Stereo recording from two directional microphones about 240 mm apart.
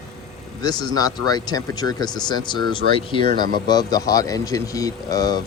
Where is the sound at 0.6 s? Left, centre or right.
Centre.